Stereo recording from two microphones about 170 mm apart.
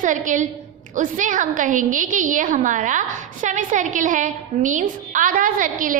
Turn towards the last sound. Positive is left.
turn(degrees=-50)  # may be behind; listen again after turning